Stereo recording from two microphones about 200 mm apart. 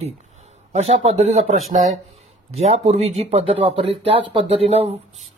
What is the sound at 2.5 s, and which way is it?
Speech, 30° right (ahead or behind).